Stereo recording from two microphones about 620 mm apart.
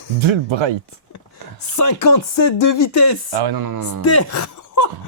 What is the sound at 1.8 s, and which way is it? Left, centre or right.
Speech, left.